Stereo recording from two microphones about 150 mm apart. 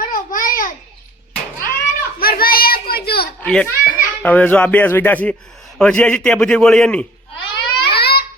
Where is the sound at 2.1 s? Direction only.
75° left (ahead or behind); by 3.2 s 90° left.